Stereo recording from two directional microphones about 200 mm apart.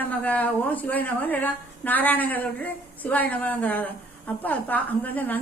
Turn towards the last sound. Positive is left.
turn(degrees=10)  # may be behind; listen again after turning